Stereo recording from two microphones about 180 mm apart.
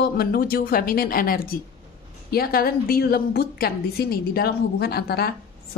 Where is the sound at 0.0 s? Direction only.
55° left (ahead or behind).